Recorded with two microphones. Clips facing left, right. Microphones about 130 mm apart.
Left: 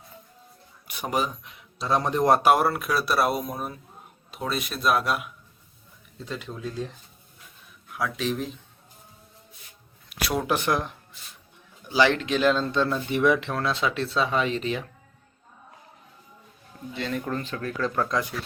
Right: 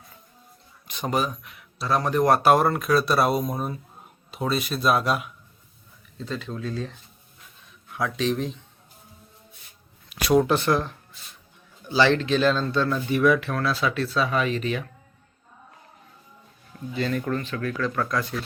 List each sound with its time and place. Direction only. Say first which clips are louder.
0.9 s speech: right 2 dB; 10° left (ahead or behind)
7.9 s speech: right 3 dB; 5° left (ahead or behind)
10.1 s speech: right 8 dB; centre (ahead or behind)
10.5 s speech: right 3 dB; 15° left (ahead or behind)
17.1 s speech: even; 15° left (ahead or behind)